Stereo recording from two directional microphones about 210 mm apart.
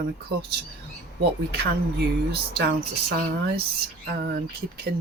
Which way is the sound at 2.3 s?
50° right (ahead or behind).